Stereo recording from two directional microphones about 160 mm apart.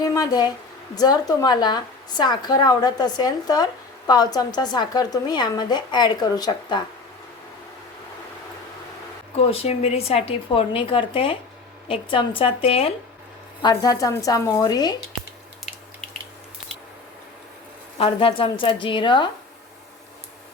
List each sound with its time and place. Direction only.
0.0 s a woman's voice: 20° left (ahead or behind)
9.5 s speech: 40° left (ahead or behind)
13.6 s a woman's voice: 25° left (ahead or behind)
17.9 s speech: 35° left (ahead or behind)